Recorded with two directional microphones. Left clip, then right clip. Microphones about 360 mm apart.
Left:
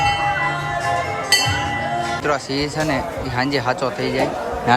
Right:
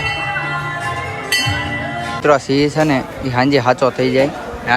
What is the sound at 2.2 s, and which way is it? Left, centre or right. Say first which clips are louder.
Speech: right 8 dB; centre.